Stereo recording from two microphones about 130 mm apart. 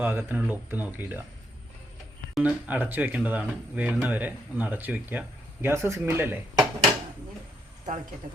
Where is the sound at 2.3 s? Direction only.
10° right (ahead or behind).